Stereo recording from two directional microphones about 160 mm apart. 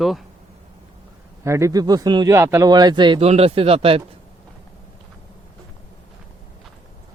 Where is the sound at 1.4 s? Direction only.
15° right (ahead or behind); by 4.0 s 35° right (ahead or behind).